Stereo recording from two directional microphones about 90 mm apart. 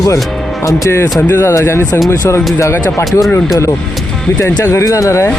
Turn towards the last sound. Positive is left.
turn(degrees=35)  # may be behind; listen again after turning